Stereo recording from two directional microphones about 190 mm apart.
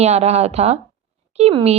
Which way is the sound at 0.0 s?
35° right (ahead or behind).